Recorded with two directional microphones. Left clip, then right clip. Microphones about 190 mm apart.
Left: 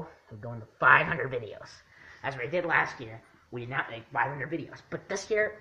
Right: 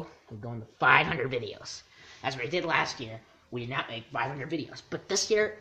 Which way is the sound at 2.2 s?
65° right (ahead or behind).